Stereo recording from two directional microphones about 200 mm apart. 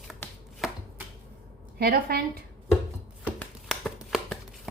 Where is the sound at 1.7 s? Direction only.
50° right (ahead or behind).